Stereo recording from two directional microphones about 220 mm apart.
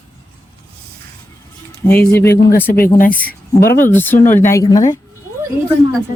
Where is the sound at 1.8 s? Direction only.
5° left (ahead or behind).